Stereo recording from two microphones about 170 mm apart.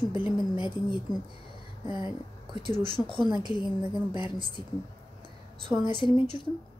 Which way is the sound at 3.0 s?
30° right (ahead or behind).